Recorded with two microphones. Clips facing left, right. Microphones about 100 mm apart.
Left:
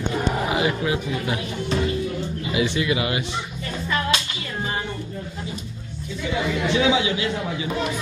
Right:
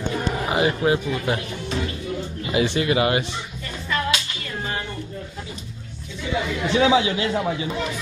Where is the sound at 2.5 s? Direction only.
45° right (ahead or behind).